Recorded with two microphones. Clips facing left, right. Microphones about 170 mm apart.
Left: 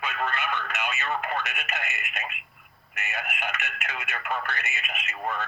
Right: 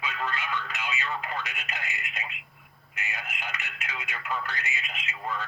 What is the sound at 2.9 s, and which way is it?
Speech, 65° left (ahead or behind).